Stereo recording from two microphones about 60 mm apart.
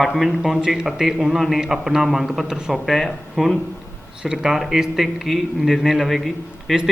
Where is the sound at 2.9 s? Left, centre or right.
Centre.